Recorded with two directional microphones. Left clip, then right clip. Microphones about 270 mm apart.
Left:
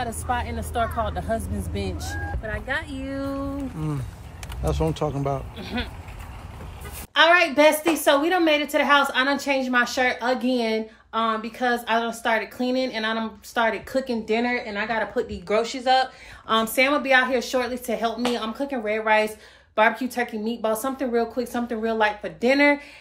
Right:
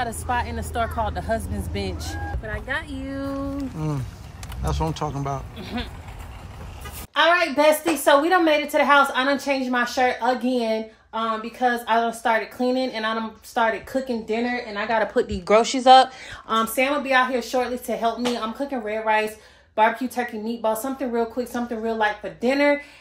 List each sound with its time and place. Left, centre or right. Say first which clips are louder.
0.1 s speech: right 2 dB; centre
2.0 s a woman's voice: even; centre
7.2 s a woman's voice: left 2 dB; centre
15.1 s speech: right 5 dB; right
16.4 s a woman's voice: left 1 dB; centre